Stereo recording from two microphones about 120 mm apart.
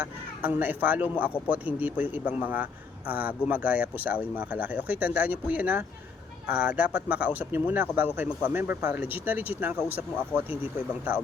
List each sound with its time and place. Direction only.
0.0 s speech: 15° right (ahead or behind)